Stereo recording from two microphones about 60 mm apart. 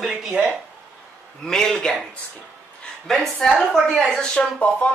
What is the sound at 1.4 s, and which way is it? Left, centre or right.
Speech, centre.